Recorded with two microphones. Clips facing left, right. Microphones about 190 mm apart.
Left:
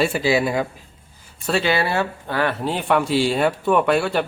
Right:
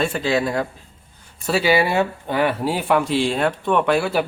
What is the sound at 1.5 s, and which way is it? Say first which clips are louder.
Speech: right 2 dB; 5° right (ahead or behind).